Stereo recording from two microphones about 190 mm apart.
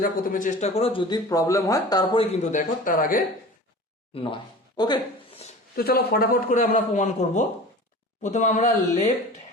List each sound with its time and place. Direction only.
0.0 s speech: 45° left (ahead or behind); by 2.2 s 20° left (ahead or behind)
2.2 s a man's voice: 35° left (ahead or behind)
4.1 s speech: 30° left (ahead or behind)
5.7 s a man's voice: 55° left (ahead or behind)